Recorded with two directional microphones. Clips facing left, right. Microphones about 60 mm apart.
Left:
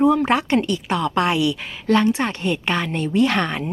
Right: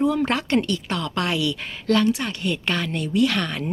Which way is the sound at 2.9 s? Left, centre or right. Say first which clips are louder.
Left 3 dB; left.